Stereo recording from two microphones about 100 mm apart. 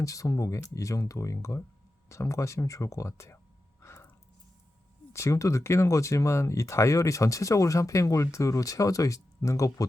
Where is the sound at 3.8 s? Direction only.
30° left (ahead or behind).